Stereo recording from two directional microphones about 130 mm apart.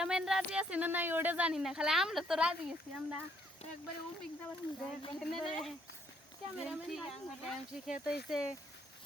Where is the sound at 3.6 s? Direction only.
55° left (ahead or behind).